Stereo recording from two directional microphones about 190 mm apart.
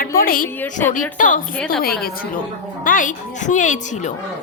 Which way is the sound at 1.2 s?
45° left (ahead or behind).